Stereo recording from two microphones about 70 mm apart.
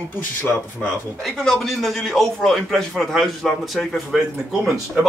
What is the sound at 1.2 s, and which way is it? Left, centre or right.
Speech, centre.